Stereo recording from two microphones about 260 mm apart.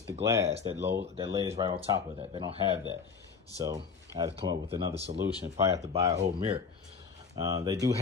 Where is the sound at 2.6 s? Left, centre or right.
Centre.